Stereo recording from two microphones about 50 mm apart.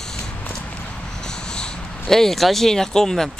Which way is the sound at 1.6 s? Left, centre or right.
Centre.